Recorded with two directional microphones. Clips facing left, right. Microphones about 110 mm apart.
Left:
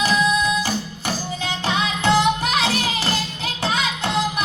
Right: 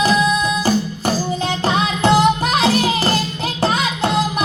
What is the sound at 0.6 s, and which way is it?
Music, 40° right (ahead or behind).